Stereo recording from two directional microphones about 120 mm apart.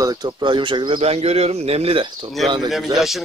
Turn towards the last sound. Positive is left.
turn(degrees=0)  # may be behind; listen again after turning